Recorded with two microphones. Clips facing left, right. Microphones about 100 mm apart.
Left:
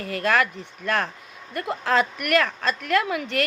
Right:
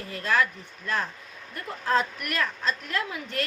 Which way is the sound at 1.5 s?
85° left.